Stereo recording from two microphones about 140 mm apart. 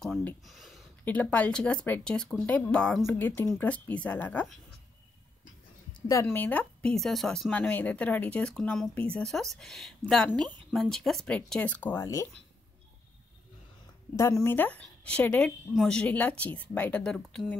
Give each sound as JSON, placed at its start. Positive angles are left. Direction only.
{"t": 0.5, "sound": "a sound", "side_deg": 0}
{"t": 1.0, "sound": "speech", "side_deg": 10}
{"t": 5.9, "sound": "a sound", "side_deg": 25}
{"t": 6.2, "sound": "speech", "side_deg": 10}
{"t": 12.0, "sound": "speech", "side_deg": 25}
{"t": 14.1, "sound": "speech", "side_deg": 20}